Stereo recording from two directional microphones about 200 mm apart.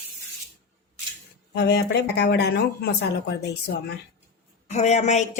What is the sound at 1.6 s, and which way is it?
Speech, 60° left (ahead or behind).